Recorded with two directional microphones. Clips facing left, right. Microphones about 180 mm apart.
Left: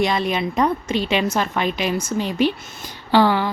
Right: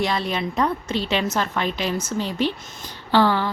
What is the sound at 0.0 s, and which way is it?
A woman's voice, 15° left (ahead or behind).